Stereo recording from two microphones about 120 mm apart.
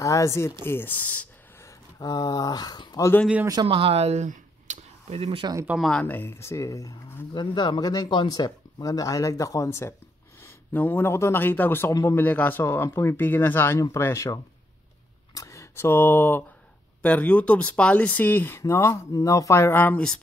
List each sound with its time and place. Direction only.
0.0 s speech: 25° left (ahead or behind)
2.0 s speech: 30° left (ahead or behind)
3.6 s speech: 55° right (ahead or behind)
5.4 s speech: 30° right (ahead or behind)
5.8 s speech: 5° left (ahead or behind)
6.0 s speech: 15° left (ahead or behind)